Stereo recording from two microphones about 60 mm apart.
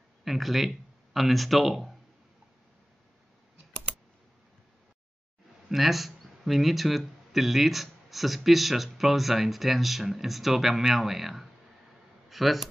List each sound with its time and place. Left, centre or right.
0.2 s speech: centre
5.7 s speech: centre